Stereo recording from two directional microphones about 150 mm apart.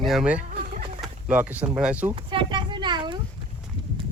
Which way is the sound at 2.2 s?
30° right (ahead or behind).